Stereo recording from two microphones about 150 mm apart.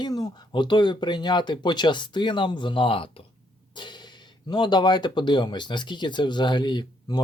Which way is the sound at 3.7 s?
30° left (ahead or behind).